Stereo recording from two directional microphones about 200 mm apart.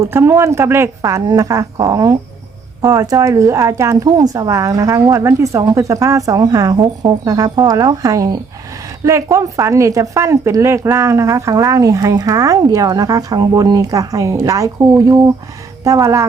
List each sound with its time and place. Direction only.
0.0 s speech: 10° right (ahead or behind)